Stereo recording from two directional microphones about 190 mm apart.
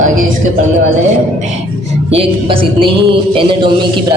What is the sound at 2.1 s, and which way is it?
Speech, 30° right (ahead or behind).